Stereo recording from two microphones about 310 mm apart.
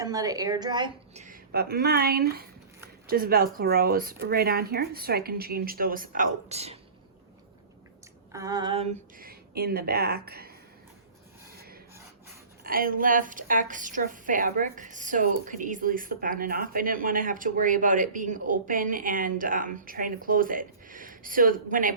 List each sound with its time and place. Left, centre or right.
0.0 s a woman's voice: centre
8.3 s speech: centre; by 10.5 s right
11.5 s filing: right
12.6 s a woman's voice: right